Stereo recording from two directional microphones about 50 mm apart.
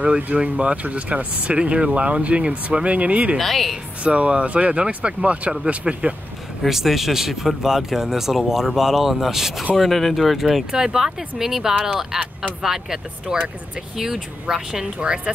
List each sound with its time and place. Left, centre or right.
0.0 s speech: right
3.3 s speech: centre
4.0 s speech: right
6.6 s speech: centre
10.7 s speech: centre